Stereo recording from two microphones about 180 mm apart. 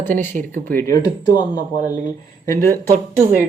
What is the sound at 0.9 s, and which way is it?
Speech, 20° left (ahead or behind).